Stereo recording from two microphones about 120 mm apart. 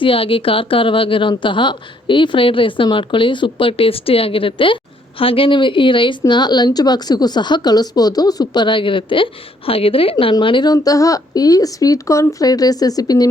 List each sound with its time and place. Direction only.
0.0 s a woman's voice: 50° left (ahead or behind); by 13.2 s 30° left (ahead or behind)